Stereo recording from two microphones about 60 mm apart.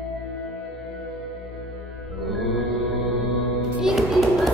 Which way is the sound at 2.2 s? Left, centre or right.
Centre.